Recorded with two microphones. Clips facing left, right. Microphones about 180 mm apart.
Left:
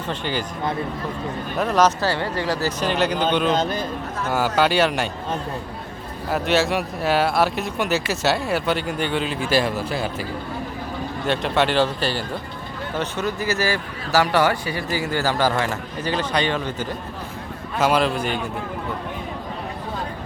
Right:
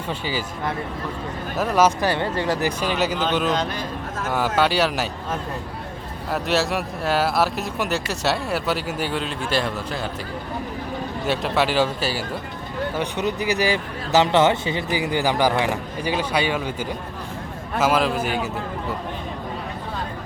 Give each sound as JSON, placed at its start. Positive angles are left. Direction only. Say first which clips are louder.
{"t": 0.1, "sound": "speech", "louder": "left 1 dB", "side_deg": -5}
{"t": 1.5, "sound": "speech", "louder": "even", "side_deg": -5}
{"t": 2.9, "sound": "speech", "louder": "left 4 dB", "side_deg": -5}
{"t": 6.3, "sound": "speech", "louder": "left 2 dB", "side_deg": 0}
{"t": 11.3, "sound": "speech", "louder": "left 1 dB", "side_deg": -5}
{"t": 13.0, "sound": "speech", "louder": "left 1 dB", "side_deg": -15}
{"t": 17.7, "sound": "speech", "louder": "even", "side_deg": 0}